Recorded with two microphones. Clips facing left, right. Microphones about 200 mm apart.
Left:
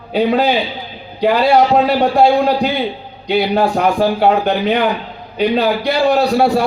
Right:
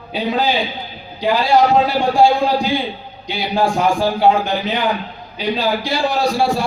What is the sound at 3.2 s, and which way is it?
Speech, 60° left (ahead or behind).